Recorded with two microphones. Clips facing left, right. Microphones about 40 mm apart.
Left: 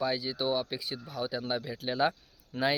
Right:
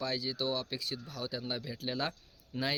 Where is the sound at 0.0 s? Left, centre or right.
Centre.